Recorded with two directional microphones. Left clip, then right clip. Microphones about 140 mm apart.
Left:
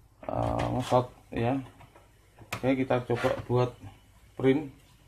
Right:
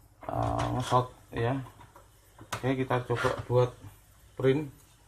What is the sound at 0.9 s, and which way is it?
Speech, 60° left (ahead or behind).